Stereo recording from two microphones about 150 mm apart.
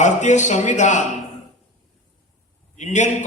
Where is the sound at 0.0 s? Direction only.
55° left (ahead or behind).